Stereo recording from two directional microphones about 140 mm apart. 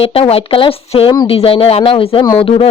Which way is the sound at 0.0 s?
45° left (ahead or behind).